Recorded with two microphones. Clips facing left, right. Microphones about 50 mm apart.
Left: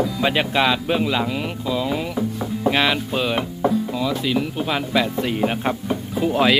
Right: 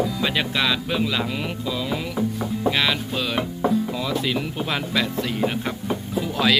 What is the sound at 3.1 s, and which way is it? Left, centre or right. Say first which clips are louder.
Speech: left 3 dB; left.